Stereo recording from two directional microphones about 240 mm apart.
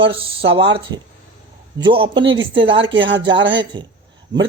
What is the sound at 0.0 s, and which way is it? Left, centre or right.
Speech, right.